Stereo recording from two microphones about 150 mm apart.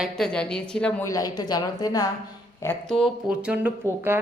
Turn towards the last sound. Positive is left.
turn(degrees=-10)  # may be behind; listen again after turning